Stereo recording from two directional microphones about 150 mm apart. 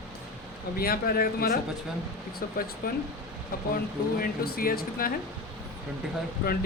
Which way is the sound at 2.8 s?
85° left.